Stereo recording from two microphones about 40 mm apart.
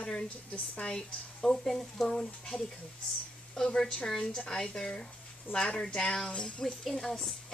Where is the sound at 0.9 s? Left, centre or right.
Centre.